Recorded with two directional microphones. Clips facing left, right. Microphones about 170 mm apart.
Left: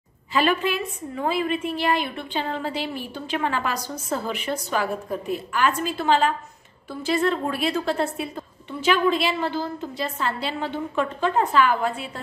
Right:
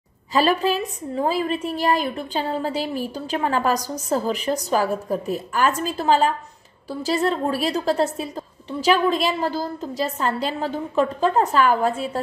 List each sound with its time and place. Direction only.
0.3 s a woman's voice: 40° right (ahead or behind)